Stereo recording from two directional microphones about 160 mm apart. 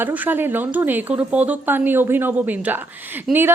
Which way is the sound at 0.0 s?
10° right (ahead or behind).